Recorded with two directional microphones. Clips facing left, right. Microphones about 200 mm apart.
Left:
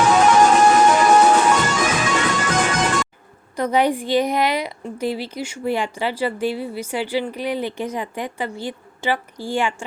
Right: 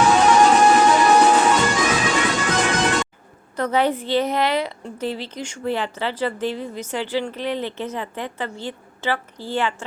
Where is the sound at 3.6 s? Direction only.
15° left (ahead or behind).